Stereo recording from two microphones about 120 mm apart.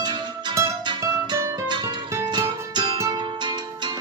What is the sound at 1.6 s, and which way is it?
Music, 35° right (ahead or behind).